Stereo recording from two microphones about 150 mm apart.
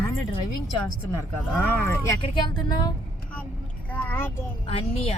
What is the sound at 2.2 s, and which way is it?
Speech, 30° left (ahead or behind).